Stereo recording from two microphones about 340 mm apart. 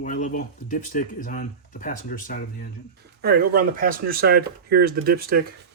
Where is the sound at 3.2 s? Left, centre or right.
Right.